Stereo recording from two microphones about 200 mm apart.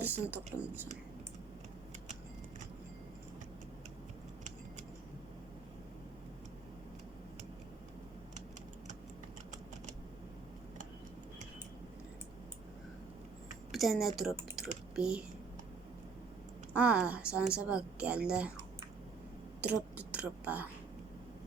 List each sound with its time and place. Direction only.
0.0 s speech: 10° right (ahead or behind)
13.7 s a sound: centre (ahead or behind)
14.5 s typing: centre (ahead or behind)
16.7 s a woman's voice: 5° right (ahead or behind)
19.6 s speech: 5° right (ahead or behind)